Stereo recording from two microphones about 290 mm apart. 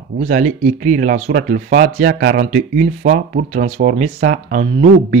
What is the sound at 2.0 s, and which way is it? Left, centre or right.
Speech, right.